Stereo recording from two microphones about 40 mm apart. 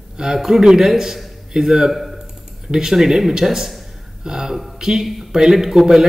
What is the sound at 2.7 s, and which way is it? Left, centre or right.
A man's voice, centre.